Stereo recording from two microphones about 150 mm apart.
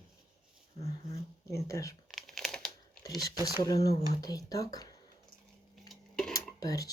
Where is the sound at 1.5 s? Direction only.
20° left (ahead or behind).